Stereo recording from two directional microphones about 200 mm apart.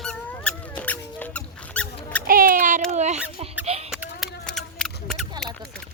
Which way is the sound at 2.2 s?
45° right (ahead or behind).